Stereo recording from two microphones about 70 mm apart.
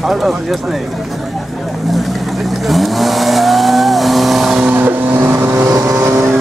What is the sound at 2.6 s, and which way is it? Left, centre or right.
Vehicle, centre.